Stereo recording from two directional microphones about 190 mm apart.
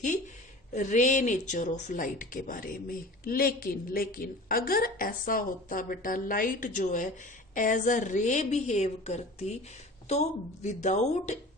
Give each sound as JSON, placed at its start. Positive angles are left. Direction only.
{"t": 0.7, "sound": "a woman's voice", "side_deg": 40}